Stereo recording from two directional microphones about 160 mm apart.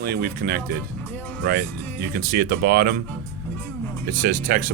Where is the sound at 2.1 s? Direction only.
75° right (ahead or behind).